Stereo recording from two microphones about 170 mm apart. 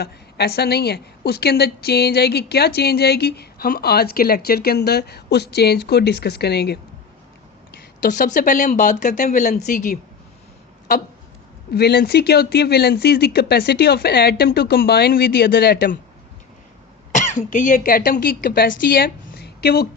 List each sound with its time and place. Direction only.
0.0 s a woman's voice: 70° left (ahead or behind)
7.7 s a sound: 75° left (ahead or behind)
8.3 s speech: 50° left (ahead or behind)
11.7 s a woman's voice: 70° left (ahead or behind)
17.2 s speech: 50° left (ahead or behind); by 19.9 s 65° left (ahead or behind)